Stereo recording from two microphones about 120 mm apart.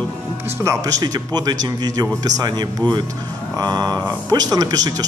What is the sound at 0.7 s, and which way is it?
Speech, 30° right (ahead or behind).